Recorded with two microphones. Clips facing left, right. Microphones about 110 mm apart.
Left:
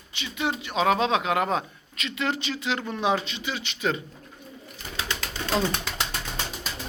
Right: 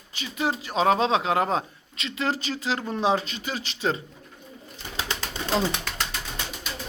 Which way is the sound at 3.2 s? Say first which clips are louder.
Even; 40° right (ahead or behind).